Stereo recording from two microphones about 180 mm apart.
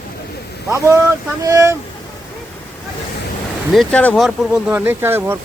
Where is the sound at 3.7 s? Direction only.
5° left (ahead or behind); by 5.4 s 15° right (ahead or behind).